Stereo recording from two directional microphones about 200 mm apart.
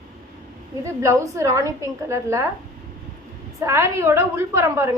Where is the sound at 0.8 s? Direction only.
15° right (ahead or behind).